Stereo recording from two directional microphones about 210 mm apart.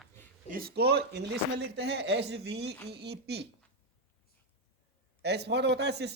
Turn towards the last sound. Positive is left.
turn(degrees=-55)  # may be behind; listen again after turning